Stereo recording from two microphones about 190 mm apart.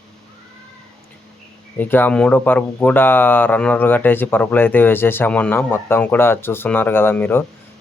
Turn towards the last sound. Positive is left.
turn(degrees=10)  # may be behind; listen again after turning